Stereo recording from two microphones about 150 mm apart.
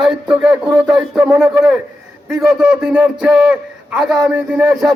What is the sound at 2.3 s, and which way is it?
A man's voice, centre (ahead or behind).